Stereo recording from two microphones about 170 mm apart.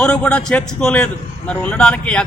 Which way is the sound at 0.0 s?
5° left (ahead or behind).